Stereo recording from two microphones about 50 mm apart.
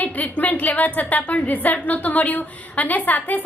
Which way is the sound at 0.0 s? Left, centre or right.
Left.